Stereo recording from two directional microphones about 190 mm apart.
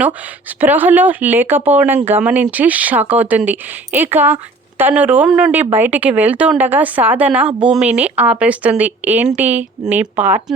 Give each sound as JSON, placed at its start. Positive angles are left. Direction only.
{"t": 0.6, "sound": "speech", "side_deg": -10}